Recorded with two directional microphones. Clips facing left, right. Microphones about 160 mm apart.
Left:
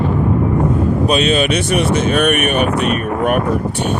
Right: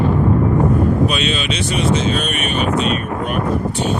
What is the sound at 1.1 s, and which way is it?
Speech, 45° left (ahead or behind).